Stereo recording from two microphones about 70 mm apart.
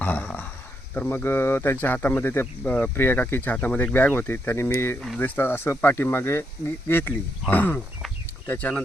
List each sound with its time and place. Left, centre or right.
0.0 s a sound: left
0.9 s speech: left
4.9 s speech: centre
5.2 s speech: left